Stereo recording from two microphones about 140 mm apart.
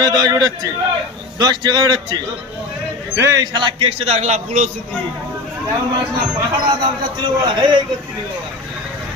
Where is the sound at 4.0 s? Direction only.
50° right (ahead or behind).